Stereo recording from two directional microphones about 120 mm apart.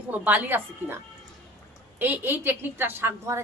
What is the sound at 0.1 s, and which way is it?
Speech, 15° right (ahead or behind).